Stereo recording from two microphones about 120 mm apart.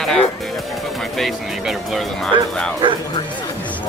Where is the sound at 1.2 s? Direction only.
Centre (ahead or behind).